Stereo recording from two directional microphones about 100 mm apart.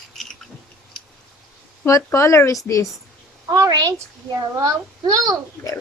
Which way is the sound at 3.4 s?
35° right (ahead or behind).